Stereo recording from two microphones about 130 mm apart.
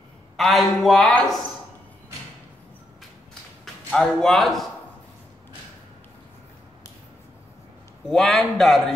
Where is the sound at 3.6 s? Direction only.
5° left (ahead or behind).